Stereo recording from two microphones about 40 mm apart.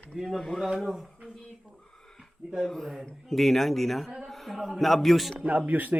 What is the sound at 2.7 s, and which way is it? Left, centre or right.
Speech, centre.